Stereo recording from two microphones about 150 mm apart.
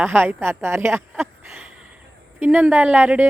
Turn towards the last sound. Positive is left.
turn(degrees=-10)  # may be behind; listen again after turning